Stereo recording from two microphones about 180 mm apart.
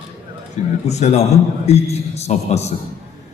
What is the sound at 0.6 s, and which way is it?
A man's voice, 40° left (ahead or behind).